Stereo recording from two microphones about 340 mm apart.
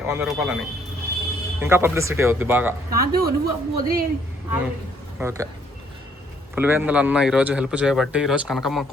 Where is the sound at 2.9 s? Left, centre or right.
Right.